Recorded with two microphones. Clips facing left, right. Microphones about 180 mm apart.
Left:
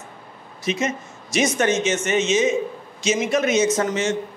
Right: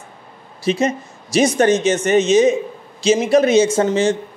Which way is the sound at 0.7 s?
35° right (ahead or behind).